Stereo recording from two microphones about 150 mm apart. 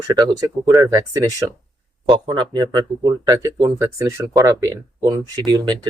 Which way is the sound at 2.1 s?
30° right (ahead or behind).